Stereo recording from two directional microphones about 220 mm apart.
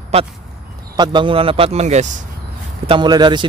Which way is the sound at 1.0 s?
20° right (ahead or behind).